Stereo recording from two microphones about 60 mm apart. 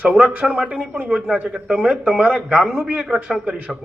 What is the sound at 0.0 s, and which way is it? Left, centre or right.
A man's voice, right.